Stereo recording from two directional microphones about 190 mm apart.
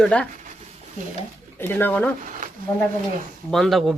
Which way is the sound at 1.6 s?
10° left (ahead or behind).